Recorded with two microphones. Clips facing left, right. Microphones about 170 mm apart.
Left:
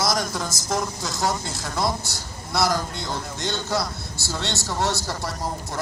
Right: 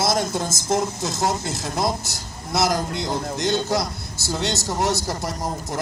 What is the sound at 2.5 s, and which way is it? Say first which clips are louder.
A man's voice: right 2 dB; 20° right (ahead or behind).